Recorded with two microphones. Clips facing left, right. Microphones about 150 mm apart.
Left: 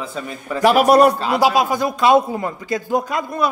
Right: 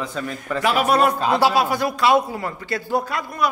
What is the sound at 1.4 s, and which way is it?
Speech, 15° left (ahead or behind).